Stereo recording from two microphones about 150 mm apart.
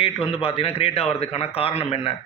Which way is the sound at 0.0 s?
40° left (ahead or behind).